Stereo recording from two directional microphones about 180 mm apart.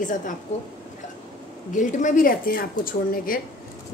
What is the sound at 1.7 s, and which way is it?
A woman's voice, 45° left (ahead or behind).